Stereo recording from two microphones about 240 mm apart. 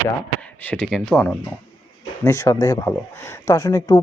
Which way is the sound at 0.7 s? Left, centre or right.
Centre.